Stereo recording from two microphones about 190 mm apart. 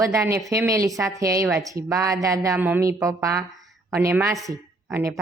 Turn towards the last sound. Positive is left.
turn(degrees=-15)  # may be behind; listen again after turning